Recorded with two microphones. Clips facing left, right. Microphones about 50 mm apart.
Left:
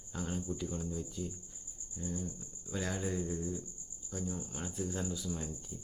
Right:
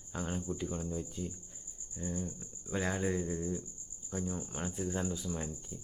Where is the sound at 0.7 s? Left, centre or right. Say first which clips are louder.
Right 1 dB; centre.